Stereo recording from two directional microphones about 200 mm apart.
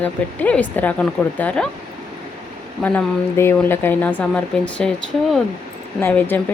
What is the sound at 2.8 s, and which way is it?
Speech, 10° left (ahead or behind).